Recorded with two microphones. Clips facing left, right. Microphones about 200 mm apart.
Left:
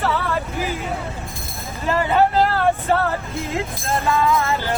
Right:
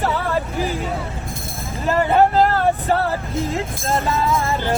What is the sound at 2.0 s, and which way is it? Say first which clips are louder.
Vehicle: right 2 dB; 45° right (ahead or behind).